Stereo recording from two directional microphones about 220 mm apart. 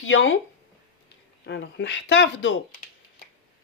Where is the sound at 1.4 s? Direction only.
50° left (ahead or behind).